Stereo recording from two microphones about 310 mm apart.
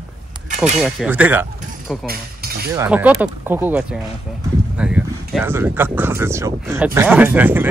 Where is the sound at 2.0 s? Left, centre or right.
Right.